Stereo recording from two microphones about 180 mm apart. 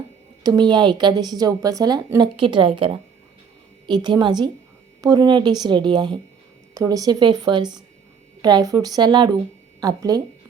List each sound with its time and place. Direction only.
0.4 s a woman's voice: 25° right (ahead or behind)